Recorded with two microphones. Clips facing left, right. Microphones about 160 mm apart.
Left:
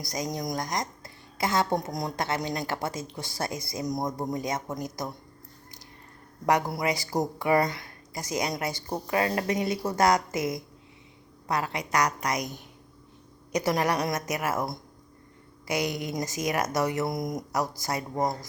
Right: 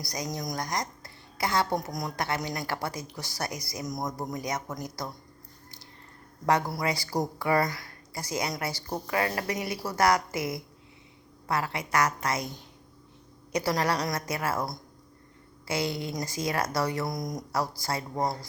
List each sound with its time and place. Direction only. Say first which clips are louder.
0.0 s a woman's voice: left 3 dB; 20° left (ahead or behind)
6.4 s a woman's voice: left 1 dB; 15° left (ahead or behind)